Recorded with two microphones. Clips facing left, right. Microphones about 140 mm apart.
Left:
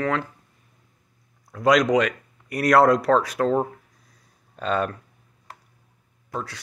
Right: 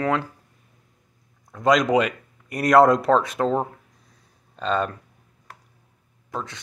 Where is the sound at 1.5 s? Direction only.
Centre (ahead or behind).